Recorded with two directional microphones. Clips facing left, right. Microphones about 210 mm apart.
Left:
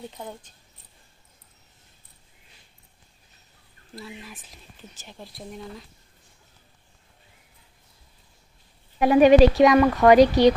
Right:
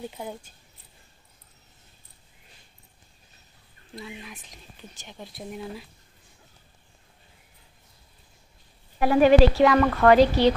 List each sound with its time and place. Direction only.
0.1 s speech: 10° right (ahead or behind)
3.9 s speech: centre (ahead or behind)
9.0 s speech: 20° left (ahead or behind)